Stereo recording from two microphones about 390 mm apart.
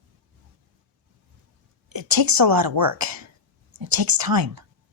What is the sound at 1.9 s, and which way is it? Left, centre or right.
A woman's voice, right.